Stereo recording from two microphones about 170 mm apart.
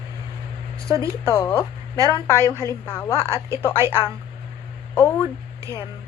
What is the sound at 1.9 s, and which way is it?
Speech, 20° right (ahead or behind).